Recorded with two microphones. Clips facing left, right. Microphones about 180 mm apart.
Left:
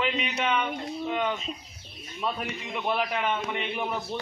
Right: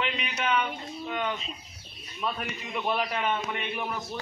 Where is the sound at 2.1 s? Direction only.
20° left (ahead or behind).